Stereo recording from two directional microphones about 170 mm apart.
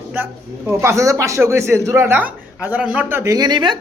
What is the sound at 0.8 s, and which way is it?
Speech, 15° right (ahead or behind).